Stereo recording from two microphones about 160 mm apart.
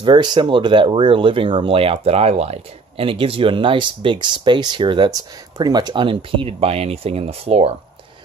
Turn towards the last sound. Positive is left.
turn(degrees=-40)  # may be behind; listen again after turning